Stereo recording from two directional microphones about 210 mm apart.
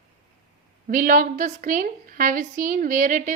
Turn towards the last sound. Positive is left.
turn(degrees=-40)  # may be behind; listen again after turning